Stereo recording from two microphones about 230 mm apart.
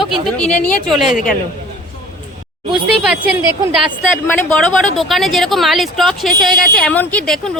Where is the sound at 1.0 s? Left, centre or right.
Left.